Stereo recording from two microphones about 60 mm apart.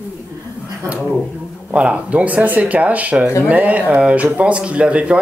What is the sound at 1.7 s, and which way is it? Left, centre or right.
Speech, centre.